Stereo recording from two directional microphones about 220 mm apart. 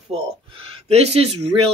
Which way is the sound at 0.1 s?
30° right (ahead or behind).